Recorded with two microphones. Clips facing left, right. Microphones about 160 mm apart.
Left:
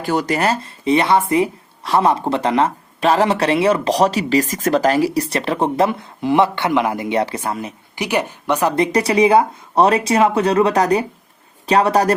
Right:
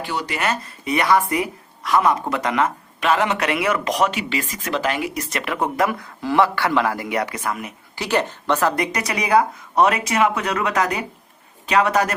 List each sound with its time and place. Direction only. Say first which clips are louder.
0.0 s speech: left 6 dB; 45° left (ahead or behind); by 7.7 s 30° left (ahead or behind)
7.9 s a woman's voice: left 1 dB; 15° left (ahead or behind)
8.7 s speech: left 8 dB; 30° left (ahead or behind)